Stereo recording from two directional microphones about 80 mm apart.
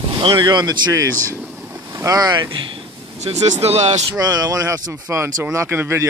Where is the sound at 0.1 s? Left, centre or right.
Right.